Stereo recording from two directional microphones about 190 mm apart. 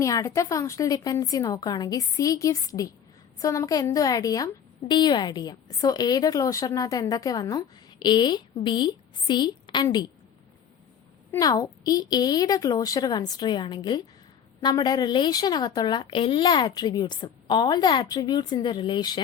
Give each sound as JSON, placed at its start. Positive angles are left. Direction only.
{"t": 0.0, "sound": "a woman's voice", "side_deg": 15}
{"t": 11.3, "sound": "a woman's voice", "side_deg": 20}